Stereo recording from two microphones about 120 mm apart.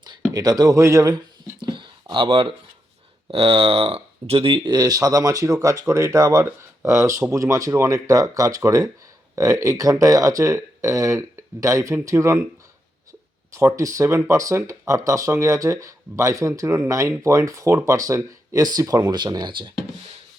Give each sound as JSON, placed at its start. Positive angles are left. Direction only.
{"t": 0.0, "sound": "speech", "side_deg": -35}
{"t": 1.6, "sound": "a sound", "side_deg": -45}
{"t": 3.2, "sound": "speech", "side_deg": -50}
{"t": 13.5, "sound": "speech", "side_deg": -25}